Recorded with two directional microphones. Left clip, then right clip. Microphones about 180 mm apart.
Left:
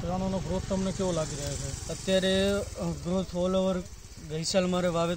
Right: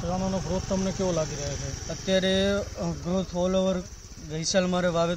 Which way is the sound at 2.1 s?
10° left (ahead or behind).